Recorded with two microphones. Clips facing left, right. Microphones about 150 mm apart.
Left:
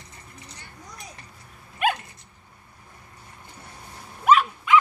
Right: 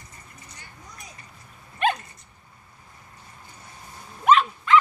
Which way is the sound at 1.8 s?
10° left (ahead or behind).